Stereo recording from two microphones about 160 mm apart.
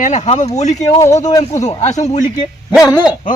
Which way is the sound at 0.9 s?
20° left (ahead or behind).